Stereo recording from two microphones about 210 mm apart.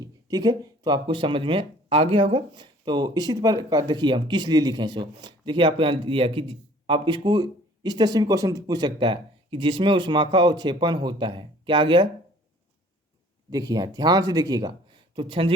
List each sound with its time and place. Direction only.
0.0 s speech: 20° right (ahead or behind)
13.5 s speech: 20° right (ahead or behind)